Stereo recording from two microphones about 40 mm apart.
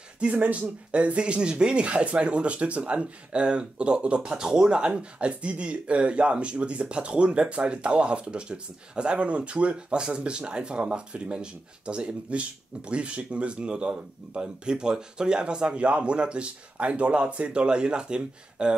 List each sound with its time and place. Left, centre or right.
0.3 s speech: right